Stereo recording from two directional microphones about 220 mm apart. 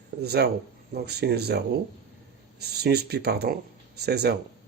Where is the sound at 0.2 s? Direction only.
50° right (ahead or behind).